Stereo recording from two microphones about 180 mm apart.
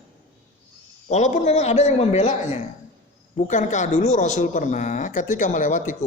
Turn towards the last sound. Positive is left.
turn(degrees=45)  # may be behind; listen again after turning